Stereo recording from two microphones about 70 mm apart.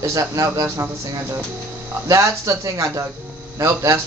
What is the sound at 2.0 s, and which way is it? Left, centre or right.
Speech, right.